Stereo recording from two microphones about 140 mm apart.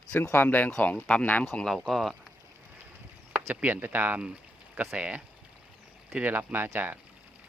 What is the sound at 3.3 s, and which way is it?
Speech, 10° right (ahead or behind).